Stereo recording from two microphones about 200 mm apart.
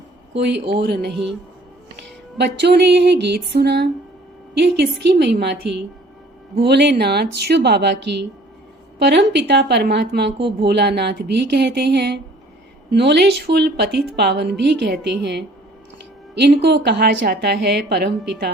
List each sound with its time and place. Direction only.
0.3 s speech: 60° right (ahead or behind)
2.4 s speech: 55° right (ahead or behind)